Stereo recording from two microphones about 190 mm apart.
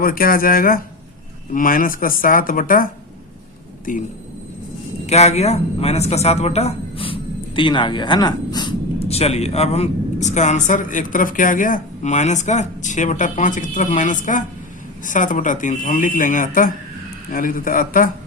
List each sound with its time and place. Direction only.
0.0 s speech: 50° left (ahead or behind)
5.0 s speech: 35° left (ahead or behind)